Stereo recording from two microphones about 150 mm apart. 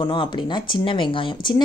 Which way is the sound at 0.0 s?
30° left (ahead or behind).